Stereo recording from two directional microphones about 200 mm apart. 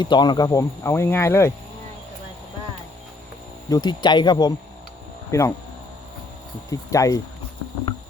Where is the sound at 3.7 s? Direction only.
20° left (ahead or behind).